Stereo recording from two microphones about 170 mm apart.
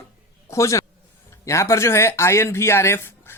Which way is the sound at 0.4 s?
15° left (ahead or behind).